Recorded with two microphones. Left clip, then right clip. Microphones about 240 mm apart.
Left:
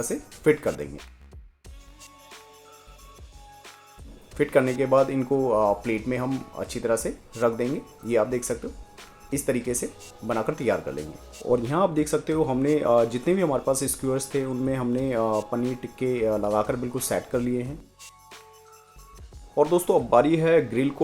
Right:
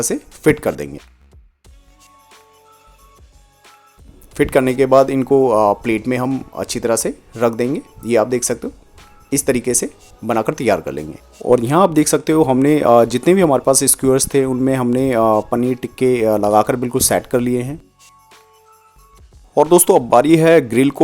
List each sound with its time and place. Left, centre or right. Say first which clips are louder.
0.0 s speech: right 8 dB; right
4.4 s speech: right 8 dB; right
18.0 s music: right 1 dB; centre
19.7 s speech: right 9 dB; right